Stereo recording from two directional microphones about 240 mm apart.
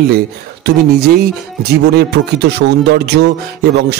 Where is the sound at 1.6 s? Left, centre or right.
Right.